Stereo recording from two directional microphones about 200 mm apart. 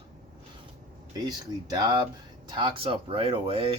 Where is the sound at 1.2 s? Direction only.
20° right (ahead or behind).